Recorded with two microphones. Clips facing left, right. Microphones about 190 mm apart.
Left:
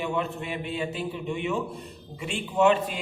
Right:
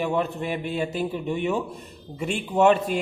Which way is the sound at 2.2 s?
40° right (ahead or behind).